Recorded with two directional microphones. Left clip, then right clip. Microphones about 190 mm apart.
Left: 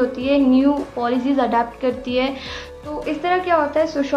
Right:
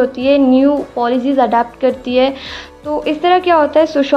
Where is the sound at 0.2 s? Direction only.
35° right (ahead or behind).